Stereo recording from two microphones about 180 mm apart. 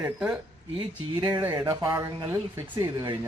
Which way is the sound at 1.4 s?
10° right (ahead or behind).